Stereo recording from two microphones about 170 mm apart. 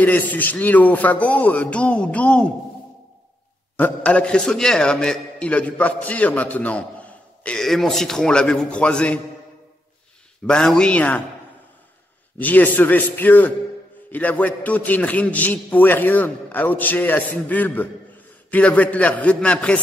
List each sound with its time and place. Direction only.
0.0 s a man's voice: 10° left (ahead or behind)
3.7 s a man's voice: 10° left (ahead or behind)
10.4 s speech: 5° left (ahead or behind)
12.4 s a man's voice: 10° left (ahead or behind)